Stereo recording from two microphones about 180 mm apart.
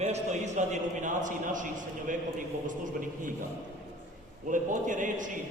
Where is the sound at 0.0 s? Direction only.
40° right (ahead or behind).